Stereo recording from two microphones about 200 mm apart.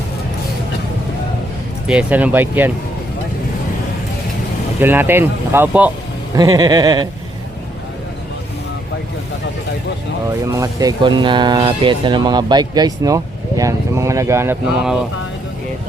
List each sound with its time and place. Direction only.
1.9 s speech: 5° right (ahead or behind)
4.8 s speech: 10° right (ahead or behind)
10.5 s speech: 15° right (ahead or behind)